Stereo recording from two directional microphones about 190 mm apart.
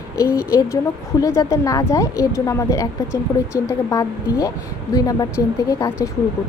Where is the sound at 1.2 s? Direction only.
15° left (ahead or behind).